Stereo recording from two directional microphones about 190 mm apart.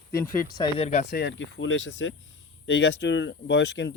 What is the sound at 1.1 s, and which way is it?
Speech, 60° left (ahead or behind).